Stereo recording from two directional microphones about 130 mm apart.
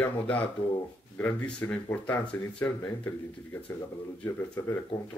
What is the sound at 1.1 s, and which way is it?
Speech, 10° left (ahead or behind).